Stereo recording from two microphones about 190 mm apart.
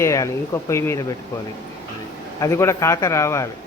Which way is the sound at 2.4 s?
15° left (ahead or behind).